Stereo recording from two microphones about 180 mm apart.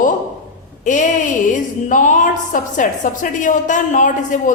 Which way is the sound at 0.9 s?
45° left (ahead or behind).